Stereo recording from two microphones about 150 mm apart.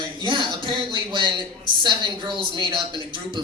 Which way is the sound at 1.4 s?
30° right (ahead or behind).